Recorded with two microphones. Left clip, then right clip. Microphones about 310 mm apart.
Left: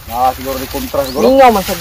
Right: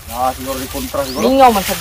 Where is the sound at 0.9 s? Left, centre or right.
Left.